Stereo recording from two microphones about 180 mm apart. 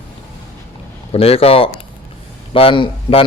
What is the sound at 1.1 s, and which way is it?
A man's voice, 35° left (ahead or behind).